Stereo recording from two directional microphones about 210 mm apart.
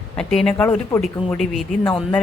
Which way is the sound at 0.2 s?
5° left (ahead or behind).